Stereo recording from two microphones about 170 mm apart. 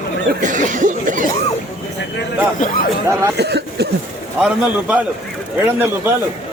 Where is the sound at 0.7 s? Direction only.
50° right (ahead or behind).